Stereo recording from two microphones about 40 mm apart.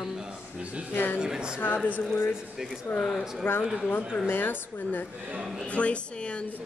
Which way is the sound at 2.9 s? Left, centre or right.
Left.